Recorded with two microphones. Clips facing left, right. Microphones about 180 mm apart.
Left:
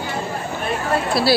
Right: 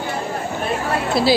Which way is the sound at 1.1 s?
15° right (ahead or behind).